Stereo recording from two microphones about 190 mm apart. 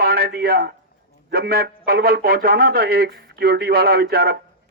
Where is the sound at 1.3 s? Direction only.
55° right (ahead or behind).